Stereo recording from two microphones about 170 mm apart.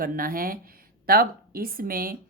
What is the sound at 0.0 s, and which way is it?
Speech, 55° right (ahead or behind).